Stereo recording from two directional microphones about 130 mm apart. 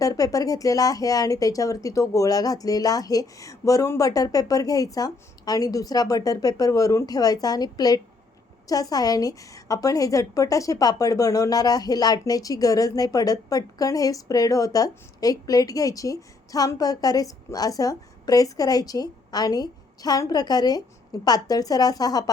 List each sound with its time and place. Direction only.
0.0 s a woman's voice: 25° left (ahead or behind)